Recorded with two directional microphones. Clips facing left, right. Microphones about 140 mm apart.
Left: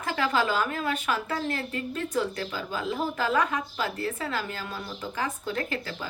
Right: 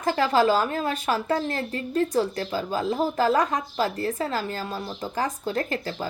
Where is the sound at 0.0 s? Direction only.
35° right (ahead or behind).